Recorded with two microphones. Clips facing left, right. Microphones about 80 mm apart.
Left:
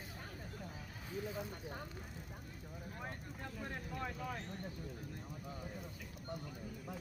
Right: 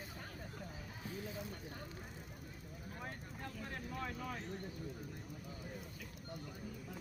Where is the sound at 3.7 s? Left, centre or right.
Centre.